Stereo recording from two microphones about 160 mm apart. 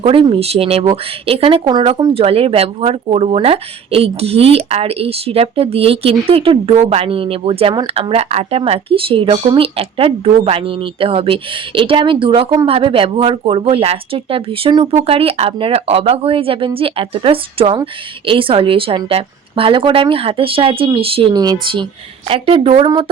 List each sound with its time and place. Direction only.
0.0 s speech: 35° right (ahead or behind)